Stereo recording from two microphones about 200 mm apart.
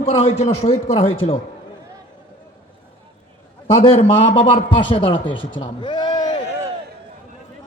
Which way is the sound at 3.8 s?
30° left (ahead or behind).